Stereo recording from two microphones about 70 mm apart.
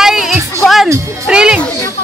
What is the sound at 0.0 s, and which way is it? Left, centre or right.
Music, centre.